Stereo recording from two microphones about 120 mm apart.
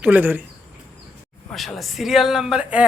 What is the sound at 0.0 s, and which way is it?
Speech, 15° right (ahead or behind).